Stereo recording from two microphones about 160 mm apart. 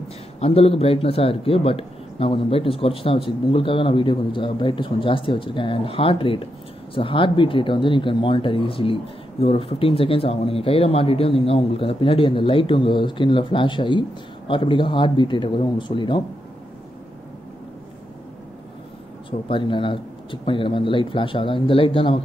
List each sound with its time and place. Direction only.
0.4 s speech: 40° left (ahead or behind)
19.5 s speech: 30° left (ahead or behind)